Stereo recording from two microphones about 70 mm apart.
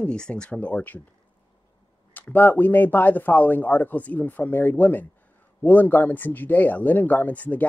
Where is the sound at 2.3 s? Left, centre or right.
Left.